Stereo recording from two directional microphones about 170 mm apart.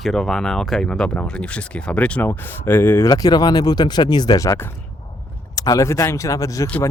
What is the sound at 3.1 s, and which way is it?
Speech, 25° left (ahead or behind).